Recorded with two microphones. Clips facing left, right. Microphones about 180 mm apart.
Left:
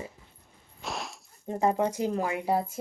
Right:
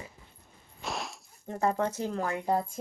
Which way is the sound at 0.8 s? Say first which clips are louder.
Even; centre (ahead or behind).